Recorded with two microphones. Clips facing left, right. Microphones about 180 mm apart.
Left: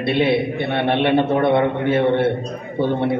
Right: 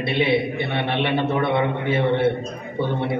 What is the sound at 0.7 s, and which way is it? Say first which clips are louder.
A man's voice: left 7 dB; 55° left (ahead or behind).